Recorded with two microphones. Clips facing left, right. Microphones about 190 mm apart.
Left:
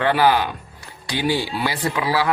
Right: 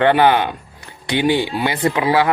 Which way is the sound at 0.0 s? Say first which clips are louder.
Right 4 dB; 20° right (ahead or behind).